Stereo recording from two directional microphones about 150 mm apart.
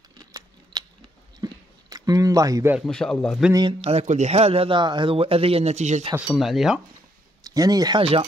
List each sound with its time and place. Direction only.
0.2 s scissors: 25° right (ahead or behind)
1.4 s a sound: 25° right (ahead or behind)
2.9 s speech: 5° left (ahead or behind)
3.8 s speech: 50° right (ahead or behind)
6.1 s speech: 5° right (ahead or behind)
7.4 s speech: 25° right (ahead or behind)
8.0 s speech: 40° right (ahead or behind)